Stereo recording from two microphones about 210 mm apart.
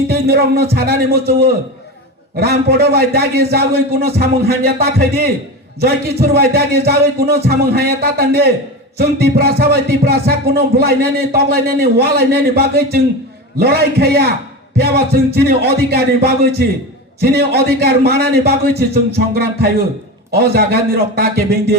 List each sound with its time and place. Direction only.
0.1 s music: 50° right (ahead or behind)